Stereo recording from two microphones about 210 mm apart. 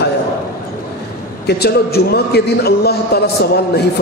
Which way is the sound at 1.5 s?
50° left (ahead or behind).